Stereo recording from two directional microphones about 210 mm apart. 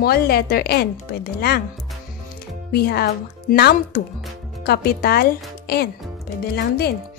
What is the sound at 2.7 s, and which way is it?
Speech, 50° left (ahead or behind).